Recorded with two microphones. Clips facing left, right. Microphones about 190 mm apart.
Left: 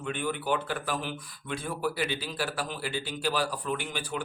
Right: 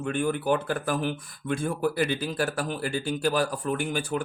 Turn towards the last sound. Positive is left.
turn(degrees=-50)  # may be behind; listen again after turning